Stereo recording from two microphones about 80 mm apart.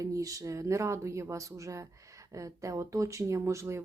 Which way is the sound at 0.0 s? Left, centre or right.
Right.